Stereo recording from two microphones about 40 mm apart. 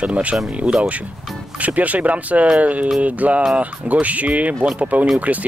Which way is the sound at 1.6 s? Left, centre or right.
Right.